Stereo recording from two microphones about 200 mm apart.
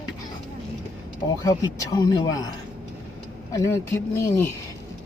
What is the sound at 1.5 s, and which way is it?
Speech, 15° left (ahead or behind).